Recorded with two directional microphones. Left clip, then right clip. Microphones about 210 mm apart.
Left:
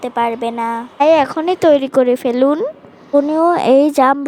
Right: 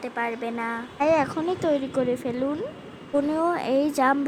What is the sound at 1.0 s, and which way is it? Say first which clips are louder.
A woman's voice: left 10 dB; 40° left (ahead or behind).